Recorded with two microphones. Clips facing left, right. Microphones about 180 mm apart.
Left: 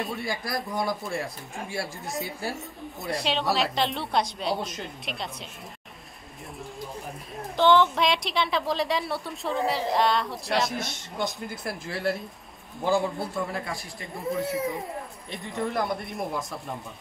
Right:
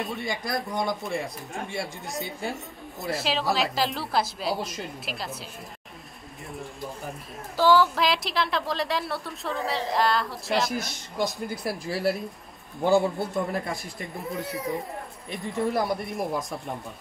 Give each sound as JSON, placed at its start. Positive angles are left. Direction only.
{"t": 0.0, "sound": "a woman's voice", "side_deg": 0}
{"t": 7.1, "sound": "a woman's voice", "side_deg": -5}
{"t": 12.8, "sound": "a man's voice", "side_deg": -20}
{"t": 13.9, "sound": "a woman's voice", "side_deg": 0}
{"t": 15.8, "sound": "a woman's voice", "side_deg": 0}